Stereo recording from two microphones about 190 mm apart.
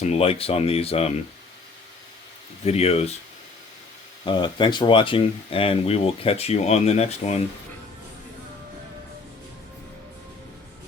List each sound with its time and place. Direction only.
0.0 s speech: 35° left (ahead or behind)
2.6 s speech: 35° left (ahead or behind)
4.2 s speech: 25° left (ahead or behind)